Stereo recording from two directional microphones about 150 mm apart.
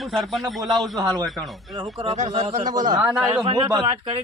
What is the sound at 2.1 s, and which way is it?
Speech, 50° right (ahead or behind).